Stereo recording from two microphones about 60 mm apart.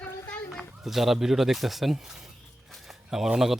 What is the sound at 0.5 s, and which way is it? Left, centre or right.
Speech, centre.